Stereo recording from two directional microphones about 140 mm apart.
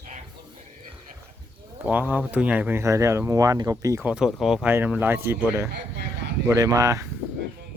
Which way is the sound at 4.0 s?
5° right (ahead or behind).